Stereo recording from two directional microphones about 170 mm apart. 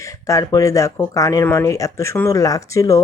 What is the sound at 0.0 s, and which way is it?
Speech, 20° left (ahead or behind).